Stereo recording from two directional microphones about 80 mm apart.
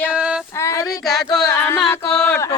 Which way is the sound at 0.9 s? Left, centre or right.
Centre.